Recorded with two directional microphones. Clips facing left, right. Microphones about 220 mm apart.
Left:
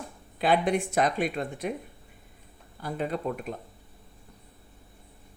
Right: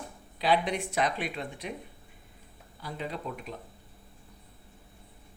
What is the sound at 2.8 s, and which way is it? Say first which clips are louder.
Speech: left 6 dB; 50° left (ahead or behind).